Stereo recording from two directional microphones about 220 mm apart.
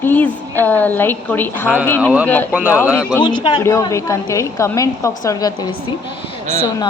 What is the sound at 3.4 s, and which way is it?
A woman's voice, 15° left (ahead or behind).